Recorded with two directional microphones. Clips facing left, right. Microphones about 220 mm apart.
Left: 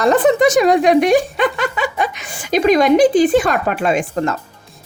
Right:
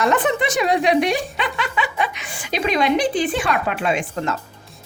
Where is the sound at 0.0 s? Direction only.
35° left (ahead or behind).